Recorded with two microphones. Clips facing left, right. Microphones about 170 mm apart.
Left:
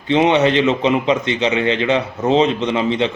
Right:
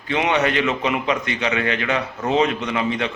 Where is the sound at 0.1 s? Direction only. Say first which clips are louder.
Left 6 dB; 25° left (ahead or behind).